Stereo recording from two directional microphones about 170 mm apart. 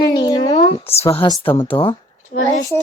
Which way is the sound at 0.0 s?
25° left (ahead or behind).